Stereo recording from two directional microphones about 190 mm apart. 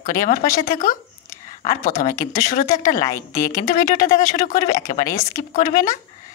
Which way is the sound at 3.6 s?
40° left (ahead or behind).